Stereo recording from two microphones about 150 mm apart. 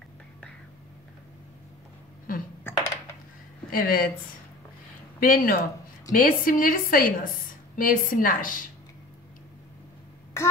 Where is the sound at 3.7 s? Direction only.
75° left (ahead or behind).